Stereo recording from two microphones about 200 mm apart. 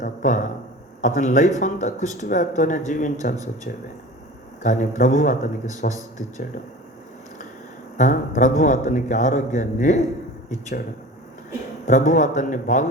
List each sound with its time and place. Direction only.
0.0 s a sound: 40° left (ahead or behind)
1.0 s speech: 40° left (ahead or behind)
4.6 s speech: 40° left (ahead or behind)
7.9 s speech: 40° left (ahead or behind)
11.9 s speech: 40° left (ahead or behind)